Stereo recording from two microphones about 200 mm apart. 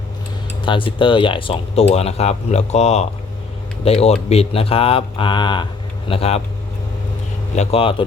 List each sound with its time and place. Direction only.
0.6 s speech: 25° left (ahead or behind)
7.5 s speech: 30° left (ahead or behind)